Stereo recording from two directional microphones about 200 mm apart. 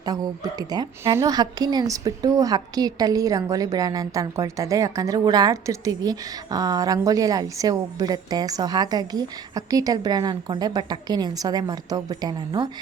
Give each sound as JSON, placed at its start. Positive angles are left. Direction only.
{"t": 0.0, "sound": "a woman's voice", "side_deg": -20}